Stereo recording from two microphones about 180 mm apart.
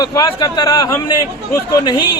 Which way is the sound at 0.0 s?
20° left (ahead or behind).